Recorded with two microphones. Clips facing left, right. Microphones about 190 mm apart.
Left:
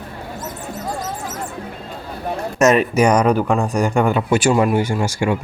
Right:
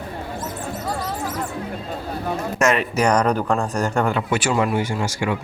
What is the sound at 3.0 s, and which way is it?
Speech, 10° left (ahead or behind).